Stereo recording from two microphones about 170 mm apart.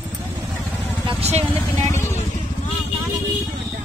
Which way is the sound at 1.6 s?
15° left (ahead or behind).